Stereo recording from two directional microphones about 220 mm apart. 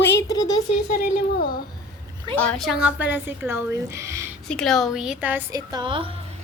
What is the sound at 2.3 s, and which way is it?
Speech, 5° left (ahead or behind).